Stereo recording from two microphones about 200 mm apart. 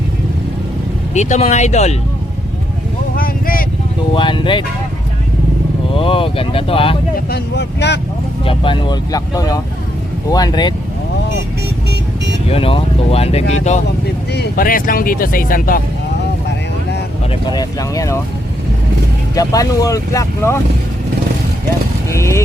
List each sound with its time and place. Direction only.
1.1 s speech: 35° left (ahead or behind)
3.2 s vehicle: 45° left (ahead or behind)
4.1 s speech: 25° left (ahead or behind)
5.9 s speech: 25° left (ahead or behind)
7.3 s speech: 55° left (ahead or behind)
8.4 s speech: 25° left (ahead or behind)
12.5 s speech: 30° left (ahead or behind)
14.3 s speech: 50° left (ahead or behind)
17.4 s speech: 20° left (ahead or behind)
19.4 s speech: 15° left (ahead or behind)
22.1 s speech: 15° left (ahead or behind)